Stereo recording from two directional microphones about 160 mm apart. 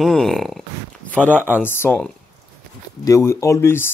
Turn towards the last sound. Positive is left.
turn(degrees=15)  # may be behind; listen again after turning